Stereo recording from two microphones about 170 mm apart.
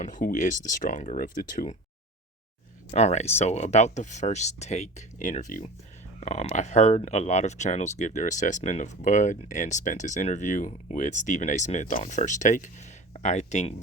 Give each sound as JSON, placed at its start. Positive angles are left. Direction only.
{"t": 0.0, "sound": "speech", "side_deg": 50}
{"t": 2.9, "sound": "speech", "side_deg": 40}